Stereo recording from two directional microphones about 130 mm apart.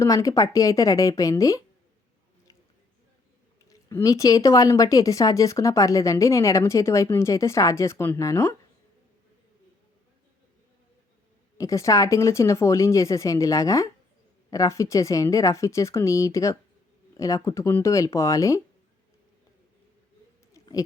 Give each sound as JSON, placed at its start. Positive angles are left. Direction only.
{"t": 0.0, "sound": "speech", "side_deg": 25}
{"t": 3.7, "sound": "speech", "side_deg": 25}
{"t": 11.5, "sound": "speech", "side_deg": 25}
{"t": 20.5, "sound": "a sound", "side_deg": 25}